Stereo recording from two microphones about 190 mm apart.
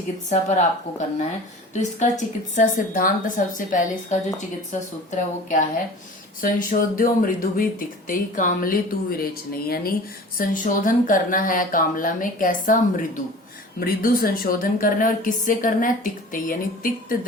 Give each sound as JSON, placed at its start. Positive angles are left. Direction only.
{"t": 0.3, "sound": "speech", "side_deg": 40}